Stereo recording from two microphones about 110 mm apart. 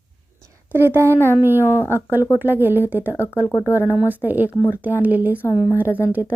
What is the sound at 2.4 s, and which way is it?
Speech, 20° right (ahead or behind).